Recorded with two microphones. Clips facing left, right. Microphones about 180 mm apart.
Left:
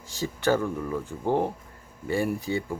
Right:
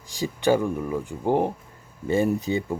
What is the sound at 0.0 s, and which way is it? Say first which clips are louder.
Speech: right 3 dB; 15° right (ahead or behind).